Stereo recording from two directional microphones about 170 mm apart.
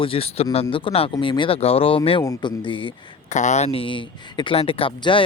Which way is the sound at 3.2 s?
45° left (ahead or behind).